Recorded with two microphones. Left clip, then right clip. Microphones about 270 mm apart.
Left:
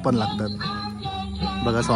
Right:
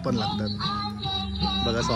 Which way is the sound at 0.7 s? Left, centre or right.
Centre.